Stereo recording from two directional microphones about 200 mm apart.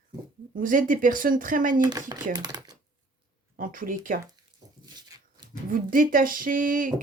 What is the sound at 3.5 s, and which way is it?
Speech, 45° right (ahead or behind).